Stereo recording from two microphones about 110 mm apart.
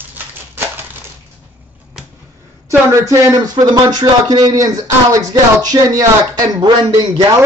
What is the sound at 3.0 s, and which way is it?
Speech, 30° right (ahead or behind).